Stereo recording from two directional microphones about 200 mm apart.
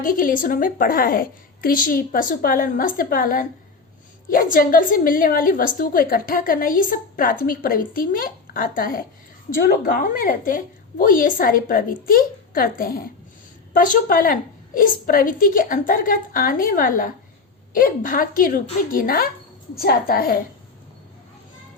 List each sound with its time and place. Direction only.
0.0 s a woman's voice: 45° left (ahead or behind)